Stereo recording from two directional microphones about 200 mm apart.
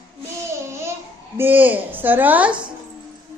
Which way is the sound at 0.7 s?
15° right (ahead or behind).